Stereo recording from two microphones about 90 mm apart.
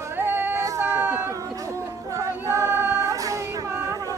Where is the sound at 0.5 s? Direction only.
35° right (ahead or behind).